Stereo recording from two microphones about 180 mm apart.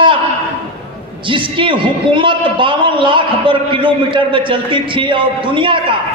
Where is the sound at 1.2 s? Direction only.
30° right (ahead or behind).